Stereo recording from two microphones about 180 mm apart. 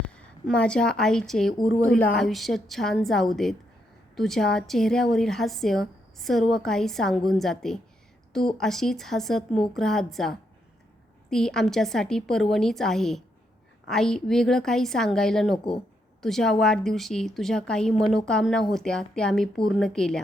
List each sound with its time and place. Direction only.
0.1 s a woman's voice: 5° left (ahead or behind)